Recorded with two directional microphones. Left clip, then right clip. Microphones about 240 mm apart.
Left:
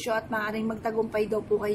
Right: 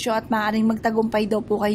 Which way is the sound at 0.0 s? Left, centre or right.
Right.